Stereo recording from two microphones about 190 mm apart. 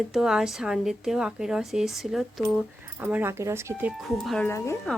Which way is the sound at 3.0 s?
10° right (ahead or behind).